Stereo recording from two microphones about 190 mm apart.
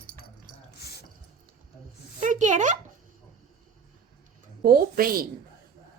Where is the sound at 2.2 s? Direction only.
40° right (ahead or behind).